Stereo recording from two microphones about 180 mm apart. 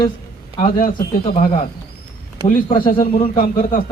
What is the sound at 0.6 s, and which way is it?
Speech, 50° left (ahead or behind).